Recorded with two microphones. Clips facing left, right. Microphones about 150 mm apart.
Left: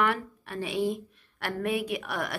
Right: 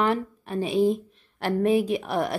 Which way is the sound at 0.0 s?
25° right (ahead or behind).